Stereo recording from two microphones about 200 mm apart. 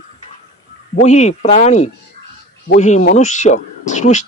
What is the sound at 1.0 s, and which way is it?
Speech, 35° left (ahead or behind).